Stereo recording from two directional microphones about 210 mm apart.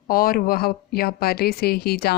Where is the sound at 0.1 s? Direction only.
45° left (ahead or behind).